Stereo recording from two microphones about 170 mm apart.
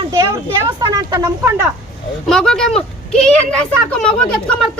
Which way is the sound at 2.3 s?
5° left (ahead or behind).